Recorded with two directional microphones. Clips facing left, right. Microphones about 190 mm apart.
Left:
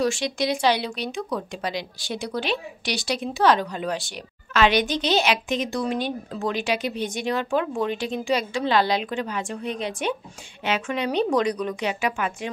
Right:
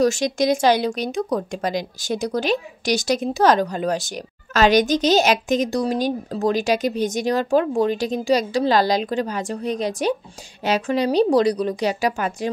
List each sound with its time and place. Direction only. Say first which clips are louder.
0.0 s speech: right 5 dB; 45° right (ahead or behind)